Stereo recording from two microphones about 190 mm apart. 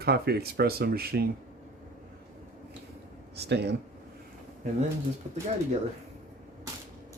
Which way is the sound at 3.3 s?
60° right (ahead or behind).